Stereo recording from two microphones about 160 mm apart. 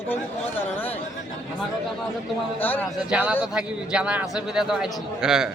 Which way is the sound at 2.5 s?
10° left (ahead or behind).